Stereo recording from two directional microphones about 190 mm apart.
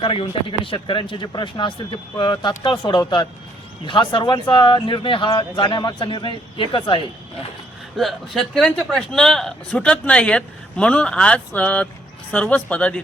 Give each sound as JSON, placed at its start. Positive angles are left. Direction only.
{"t": 0.0, "sound": "speech", "side_deg": 25}
{"t": 7.9, "sound": "a man's voice", "side_deg": 0}